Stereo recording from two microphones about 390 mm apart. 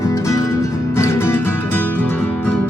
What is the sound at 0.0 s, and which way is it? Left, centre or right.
Music, centre.